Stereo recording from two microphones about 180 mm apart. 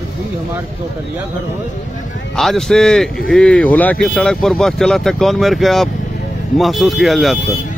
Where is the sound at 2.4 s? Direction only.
Centre (ahead or behind).